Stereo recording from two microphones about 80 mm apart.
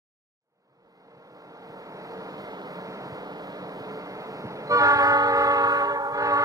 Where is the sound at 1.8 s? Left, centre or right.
Right.